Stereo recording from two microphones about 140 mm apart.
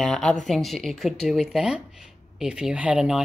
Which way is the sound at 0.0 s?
5° left (ahead or behind).